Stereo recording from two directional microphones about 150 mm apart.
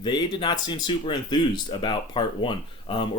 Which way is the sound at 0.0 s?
30° left (ahead or behind).